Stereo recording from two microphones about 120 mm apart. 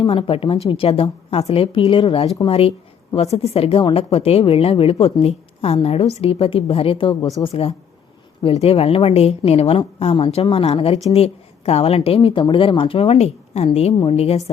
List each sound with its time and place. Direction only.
0.0 s a woman's voice: 50° left (ahead or behind)